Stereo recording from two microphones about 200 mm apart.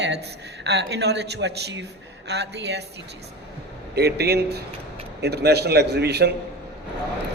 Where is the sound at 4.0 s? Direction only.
55° right (ahead or behind).